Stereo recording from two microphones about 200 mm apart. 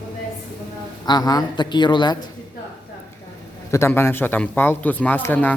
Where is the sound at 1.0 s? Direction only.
20° left (ahead or behind).